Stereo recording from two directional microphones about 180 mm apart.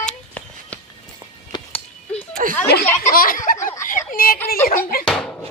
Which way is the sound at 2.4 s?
45° right (ahead or behind).